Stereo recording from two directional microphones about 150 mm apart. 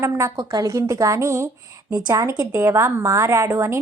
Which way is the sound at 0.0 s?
20° right (ahead or behind).